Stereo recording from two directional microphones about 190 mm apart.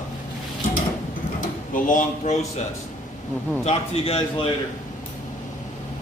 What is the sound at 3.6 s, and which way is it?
Speech, 35° left (ahead or behind).